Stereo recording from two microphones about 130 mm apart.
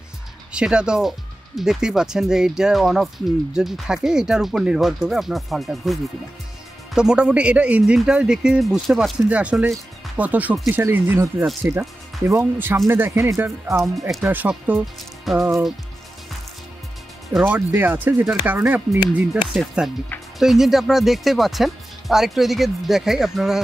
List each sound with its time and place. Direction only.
0.5 s speech: 5° right (ahead or behind)
17.4 s speech: 15° right (ahead or behind)